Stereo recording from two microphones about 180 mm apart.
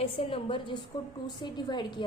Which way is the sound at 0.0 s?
30° left (ahead or behind).